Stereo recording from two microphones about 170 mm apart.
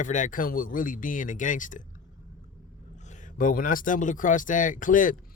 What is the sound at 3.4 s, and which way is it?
Speech, 50° left (ahead or behind).